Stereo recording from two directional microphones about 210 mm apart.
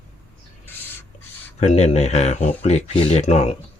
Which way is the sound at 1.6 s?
30° left (ahead or behind).